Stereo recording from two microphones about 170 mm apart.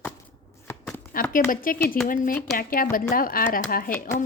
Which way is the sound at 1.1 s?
55° left (ahead or behind).